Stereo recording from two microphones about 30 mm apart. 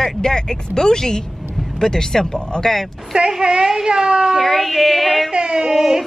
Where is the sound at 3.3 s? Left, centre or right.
Centre.